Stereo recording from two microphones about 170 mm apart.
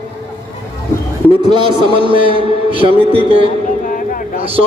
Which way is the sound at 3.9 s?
50° left (ahead or behind).